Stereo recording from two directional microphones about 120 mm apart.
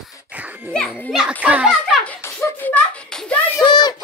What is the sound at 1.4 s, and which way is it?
Speech, 10° right (ahead or behind).